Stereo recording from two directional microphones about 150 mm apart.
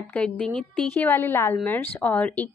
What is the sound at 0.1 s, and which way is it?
A woman's voice, 10° left (ahead or behind).